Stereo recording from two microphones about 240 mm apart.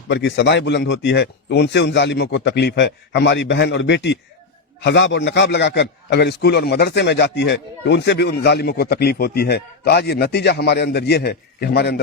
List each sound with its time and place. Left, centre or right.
0.1 s a man's voice: left